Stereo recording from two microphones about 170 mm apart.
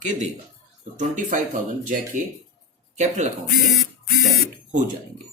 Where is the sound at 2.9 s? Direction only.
45° right (ahead or behind).